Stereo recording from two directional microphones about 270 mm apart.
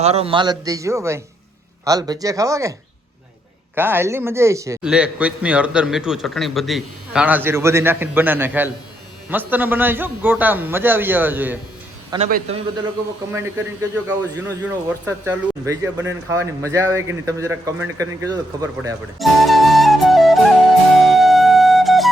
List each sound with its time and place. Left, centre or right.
0.0 s a man's voice: right
3.8 s a man's voice: centre
12.3 s a man's voice: right
14.4 s a man's voice: centre
19.2 s flute: centre
21.0 s music: centre